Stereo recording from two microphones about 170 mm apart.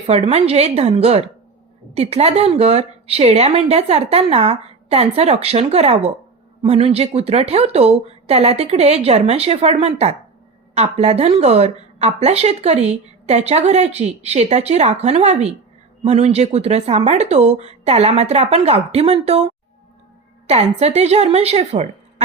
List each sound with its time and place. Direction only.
0.1 s a woman's voice: 40° right (ahead or behind)
20.5 s a woman's voice: 40° right (ahead or behind)